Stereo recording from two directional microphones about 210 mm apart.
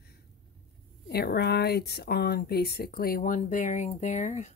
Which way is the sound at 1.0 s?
50° left (ahead or behind).